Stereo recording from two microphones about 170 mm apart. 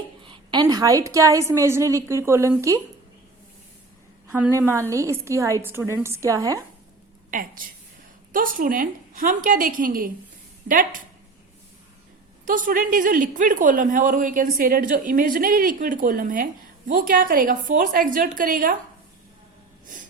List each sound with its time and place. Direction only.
0.3 s a woman's voice: 25° right (ahead or behind)
4.3 s a woman's voice: 15° right (ahead or behind)
7.3 s a woman's voice: 55° right (ahead or behind)
12.5 s a woman's voice: 50° right (ahead or behind)